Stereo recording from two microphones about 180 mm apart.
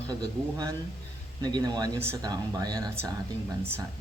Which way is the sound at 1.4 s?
20° right (ahead or behind).